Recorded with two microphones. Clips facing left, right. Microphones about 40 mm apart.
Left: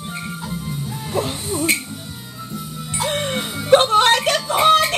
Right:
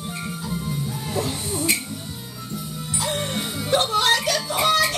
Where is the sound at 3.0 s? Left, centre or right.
Left.